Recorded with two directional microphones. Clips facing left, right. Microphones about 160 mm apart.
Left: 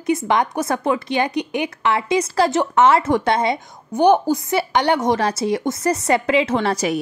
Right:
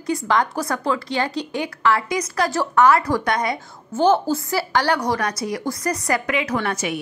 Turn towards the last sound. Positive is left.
turn(degrees=35)  # may be behind; listen again after turning